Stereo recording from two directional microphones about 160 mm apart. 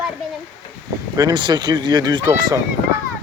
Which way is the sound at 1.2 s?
25° right (ahead or behind).